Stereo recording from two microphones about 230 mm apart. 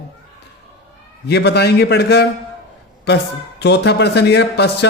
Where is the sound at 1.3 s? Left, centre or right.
Left.